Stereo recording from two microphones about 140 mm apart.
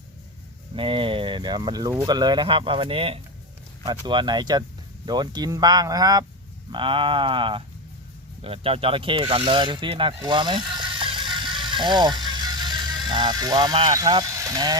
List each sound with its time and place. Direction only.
0.8 s speech: 40° right (ahead or behind)
10.2 s vehicle: 35° right (ahead or behind)